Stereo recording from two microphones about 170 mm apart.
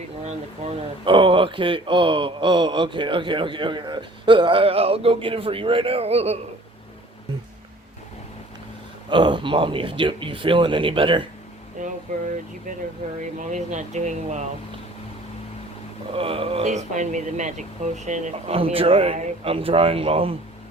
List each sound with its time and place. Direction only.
0.3 s speech: 35° right (ahead or behind)
9.0 s speech: 25° right (ahead or behind)
13.4 s speech: 45° right (ahead or behind)
16.1 s speech: 35° right (ahead or behind)
16.6 s speech: 45° right (ahead or behind)